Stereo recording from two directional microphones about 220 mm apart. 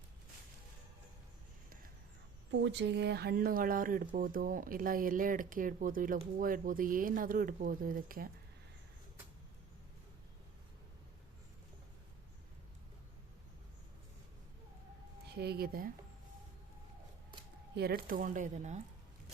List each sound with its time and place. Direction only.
2.5 s speech: 55° right (ahead or behind)
15.3 s speech: 50° right (ahead or behind)
17.7 s speech: 45° right (ahead or behind)